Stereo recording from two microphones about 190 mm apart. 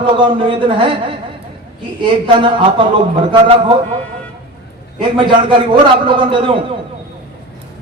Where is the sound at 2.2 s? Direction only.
25° right (ahead or behind).